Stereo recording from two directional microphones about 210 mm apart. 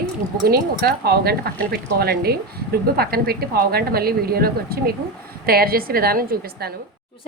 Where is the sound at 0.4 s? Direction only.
45° right (ahead or behind).